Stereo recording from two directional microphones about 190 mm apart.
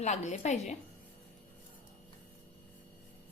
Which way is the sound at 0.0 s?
35° left (ahead or behind).